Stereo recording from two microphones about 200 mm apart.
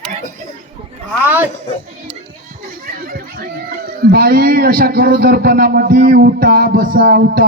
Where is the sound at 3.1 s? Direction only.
50° right (ahead or behind).